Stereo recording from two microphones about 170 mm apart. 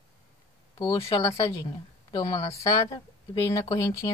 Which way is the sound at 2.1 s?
25° left (ahead or behind).